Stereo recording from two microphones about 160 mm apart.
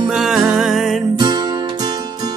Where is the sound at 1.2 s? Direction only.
25° right (ahead or behind).